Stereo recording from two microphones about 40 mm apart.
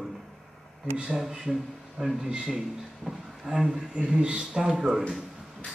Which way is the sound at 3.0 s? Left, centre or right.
Centre.